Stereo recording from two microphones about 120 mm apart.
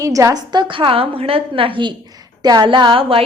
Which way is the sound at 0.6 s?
45° right (ahead or behind).